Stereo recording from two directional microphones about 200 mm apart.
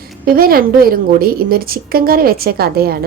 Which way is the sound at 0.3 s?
50° right (ahead or behind).